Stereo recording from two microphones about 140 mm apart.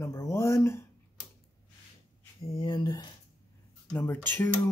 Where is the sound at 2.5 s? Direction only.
35° left (ahead or behind).